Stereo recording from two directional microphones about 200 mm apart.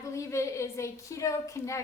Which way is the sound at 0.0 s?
15° left (ahead or behind).